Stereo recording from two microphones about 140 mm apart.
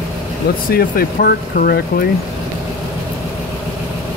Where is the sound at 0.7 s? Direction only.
90° left.